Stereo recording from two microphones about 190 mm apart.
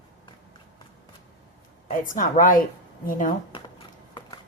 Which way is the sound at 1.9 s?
45° left (ahead or behind).